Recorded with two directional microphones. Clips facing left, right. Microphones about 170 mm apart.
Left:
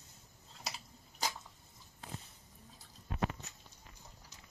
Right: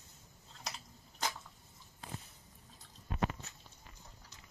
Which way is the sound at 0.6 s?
5° left (ahead or behind).